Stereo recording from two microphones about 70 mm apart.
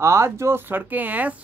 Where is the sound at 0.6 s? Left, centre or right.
Right.